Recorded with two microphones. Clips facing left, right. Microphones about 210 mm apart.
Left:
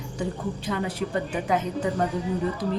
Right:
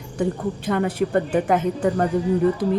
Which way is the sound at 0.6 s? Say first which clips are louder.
Right 8 dB; 55° right (ahead or behind).